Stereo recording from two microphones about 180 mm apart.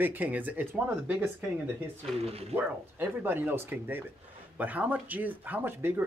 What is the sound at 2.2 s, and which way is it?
Speech, 35° right (ahead or behind).